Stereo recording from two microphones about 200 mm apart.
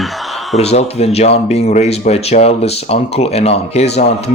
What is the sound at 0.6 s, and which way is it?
Speech, 30° left (ahead or behind).